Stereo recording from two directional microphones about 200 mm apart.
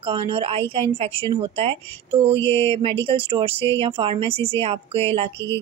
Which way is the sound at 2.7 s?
30° right (ahead or behind).